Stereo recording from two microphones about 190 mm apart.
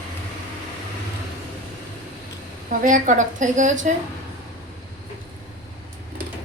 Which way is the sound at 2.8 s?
40° right (ahead or behind).